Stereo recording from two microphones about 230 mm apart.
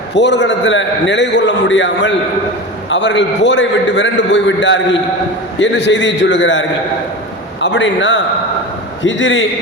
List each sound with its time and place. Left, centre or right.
0.1 s a man's voice: left